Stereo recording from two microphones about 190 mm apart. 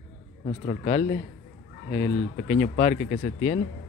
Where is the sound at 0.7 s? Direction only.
45° left (ahead or behind).